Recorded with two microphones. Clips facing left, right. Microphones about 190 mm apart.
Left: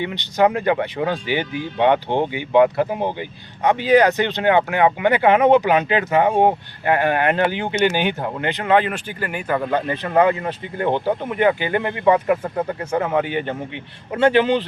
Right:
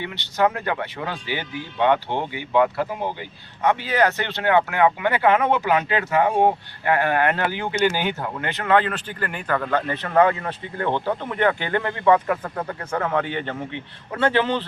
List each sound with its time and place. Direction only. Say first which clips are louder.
0.0 s speech: left 4 dB; 15° left (ahead or behind)
12.4 s speech: left 5 dB; 25° left (ahead or behind)
13.0 s speech: left 3 dB; 10° left (ahead or behind)